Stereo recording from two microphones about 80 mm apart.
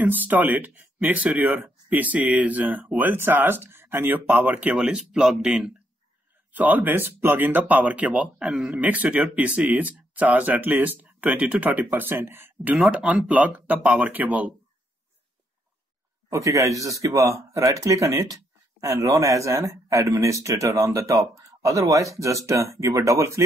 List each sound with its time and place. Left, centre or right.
0.0 s speech: right
4.7 s speech: centre
6.5 s speech: right
8.8 s speech: centre
12.7 s speech: centre
16.3 s speech: right